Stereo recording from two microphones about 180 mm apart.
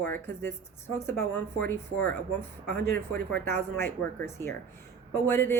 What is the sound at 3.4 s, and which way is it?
Speech, 10° left (ahead or behind).